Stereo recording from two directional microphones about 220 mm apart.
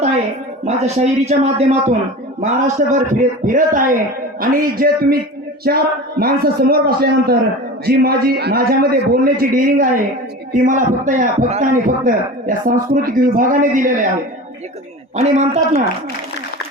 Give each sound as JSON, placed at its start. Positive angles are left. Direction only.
{"t": 0.6, "sound": "a man's voice", "side_deg": -30}
{"t": 15.1, "sound": "a man's voice", "side_deg": -30}